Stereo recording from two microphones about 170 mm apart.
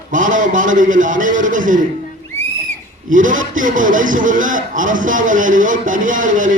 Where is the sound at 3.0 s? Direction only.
50° right (ahead or behind).